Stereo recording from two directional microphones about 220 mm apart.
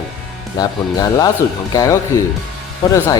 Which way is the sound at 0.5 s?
15° left (ahead or behind).